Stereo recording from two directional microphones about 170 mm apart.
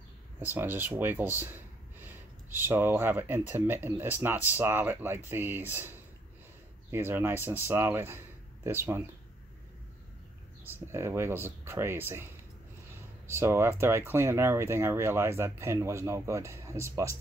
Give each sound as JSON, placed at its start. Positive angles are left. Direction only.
{"t": 0.4, "sound": "speech", "side_deg": -10}
{"t": 10.7, "sound": "speech", "side_deg": -15}
{"t": 13.3, "sound": "speech", "side_deg": -15}